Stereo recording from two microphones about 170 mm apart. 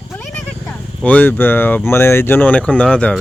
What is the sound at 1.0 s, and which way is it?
Speech, 10° left (ahead or behind).